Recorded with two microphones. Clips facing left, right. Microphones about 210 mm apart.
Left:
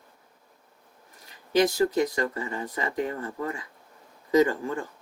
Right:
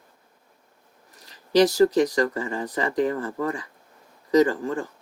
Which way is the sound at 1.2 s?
90° right.